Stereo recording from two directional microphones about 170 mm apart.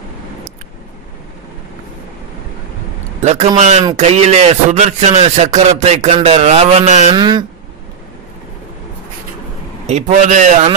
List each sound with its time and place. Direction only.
3.2 s speech: 40° right (ahead or behind)
7.2 s speech: 25° right (ahead or behind)
9.8 s a man's voice: 40° right (ahead or behind)